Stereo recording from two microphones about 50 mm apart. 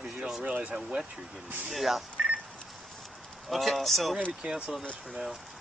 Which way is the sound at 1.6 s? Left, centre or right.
Centre.